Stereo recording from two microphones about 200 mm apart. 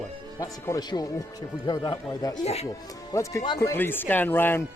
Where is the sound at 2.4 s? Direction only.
30° left (ahead or behind).